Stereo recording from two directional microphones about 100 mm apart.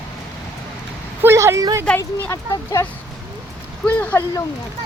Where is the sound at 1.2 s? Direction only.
25° right (ahead or behind).